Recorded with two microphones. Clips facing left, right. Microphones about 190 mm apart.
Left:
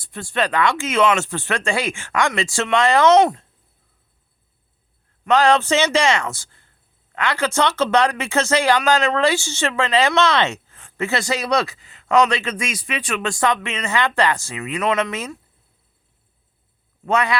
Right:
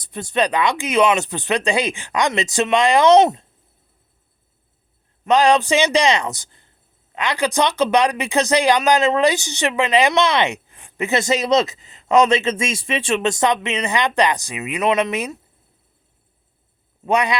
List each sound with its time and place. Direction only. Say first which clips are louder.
0.0 s speech: right 3 dB; 20° right (ahead or behind)
5.2 s speech: right 1 dB; 15° right (ahead or behind)
17.1 s speech: right 1 dB; 15° right (ahead or behind)